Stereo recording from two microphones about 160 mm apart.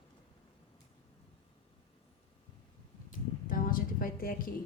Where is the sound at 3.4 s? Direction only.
60° left (ahead or behind).